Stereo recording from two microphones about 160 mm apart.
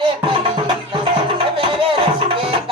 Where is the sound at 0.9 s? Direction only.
35° right (ahead or behind).